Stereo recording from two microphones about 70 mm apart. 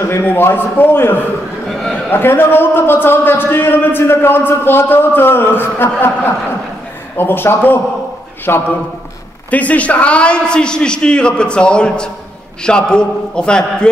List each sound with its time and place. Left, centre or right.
0.0 s a man's voice: left
1.7 s a sound: centre
2.0 s a man's voice: left
9.5 s a man's voice: left